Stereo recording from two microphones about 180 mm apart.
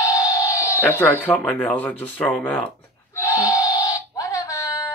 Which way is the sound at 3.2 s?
15° left (ahead or behind).